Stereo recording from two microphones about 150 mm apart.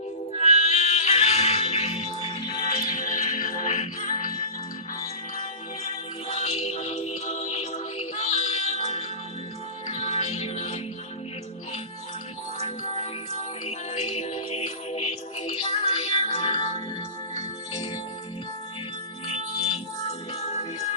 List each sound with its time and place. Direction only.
0.3 s music: 45° left (ahead or behind)
2.9 s music: 55° left (ahead or behind)
5.4 s music: 45° left (ahead or behind)
12.5 s music: 45° left (ahead or behind)
20.1 s music: 45° left (ahead or behind)